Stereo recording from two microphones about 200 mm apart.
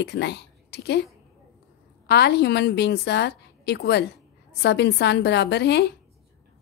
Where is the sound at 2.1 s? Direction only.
55° left (ahead or behind).